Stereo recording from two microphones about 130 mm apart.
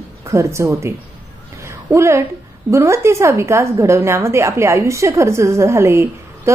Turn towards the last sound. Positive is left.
turn(degrees=-20)  # may be behind; listen again after turning